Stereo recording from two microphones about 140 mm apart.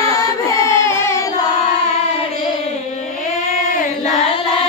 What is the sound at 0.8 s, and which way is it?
Child singing, 20° left (ahead or behind).